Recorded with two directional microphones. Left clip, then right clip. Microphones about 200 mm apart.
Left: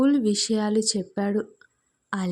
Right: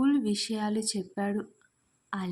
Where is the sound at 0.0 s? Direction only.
25° left (ahead or behind).